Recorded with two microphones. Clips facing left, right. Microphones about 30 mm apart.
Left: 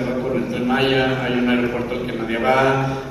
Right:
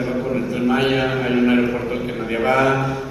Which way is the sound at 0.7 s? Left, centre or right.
Left.